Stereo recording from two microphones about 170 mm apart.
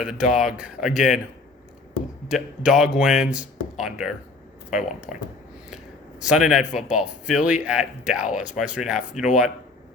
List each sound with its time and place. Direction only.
0.0 s a man's voice: 5° right (ahead or behind)
2.2 s a man's voice: 5° right (ahead or behind)
6.2 s a man's voice: 5° right (ahead or behind)
8.2 s speech: 50° left (ahead or behind)
8.5 s a man's voice: 5° right (ahead or behind)